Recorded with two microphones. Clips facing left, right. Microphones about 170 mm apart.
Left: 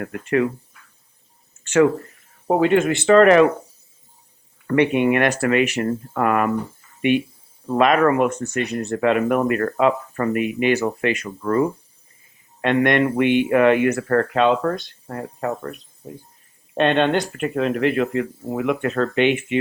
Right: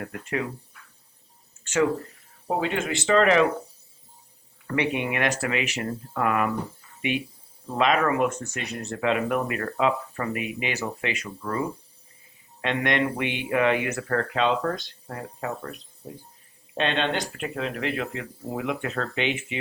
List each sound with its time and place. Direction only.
0.0 s speech: 65° left (ahead or behind)
1.6 s a sound: 65° left (ahead or behind)
2.5 s speech: 60° left (ahead or behind)
4.6 s speech: 55° left (ahead or behind)
7.7 s speech: 55° left (ahead or behind)
16.7 s speech: 55° left (ahead or behind)